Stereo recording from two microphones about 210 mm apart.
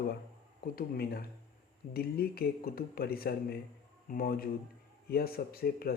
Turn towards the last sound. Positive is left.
turn(degrees=45)  # may be behind; listen again after turning